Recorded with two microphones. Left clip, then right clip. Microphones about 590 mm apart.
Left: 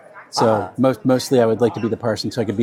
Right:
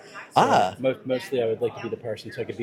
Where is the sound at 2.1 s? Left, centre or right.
Left.